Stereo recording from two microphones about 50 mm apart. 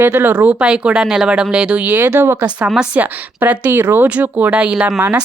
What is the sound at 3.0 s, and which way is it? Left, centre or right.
A woman's voice, right.